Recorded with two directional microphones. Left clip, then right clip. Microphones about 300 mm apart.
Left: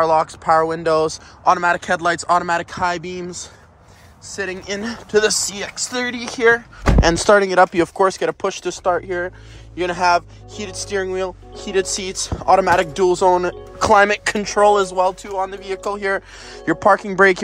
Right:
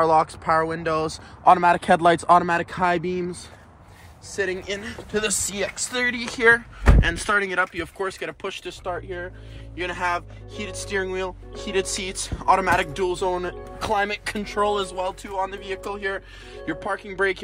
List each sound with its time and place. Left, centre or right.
0.0 s speech: centre
1.4 s speech: centre
4.4 s speech: centre
5.1 s speech: left
5.5 s speech: centre; by 17.4 s left